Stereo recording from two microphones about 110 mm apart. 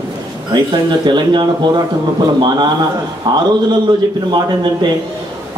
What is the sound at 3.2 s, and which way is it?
Speech, 40° right (ahead or behind).